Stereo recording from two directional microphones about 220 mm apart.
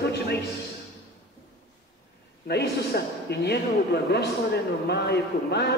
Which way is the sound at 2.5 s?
45° left (ahead or behind).